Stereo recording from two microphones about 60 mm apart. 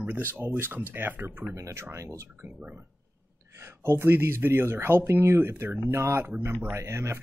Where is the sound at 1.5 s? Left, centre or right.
Right.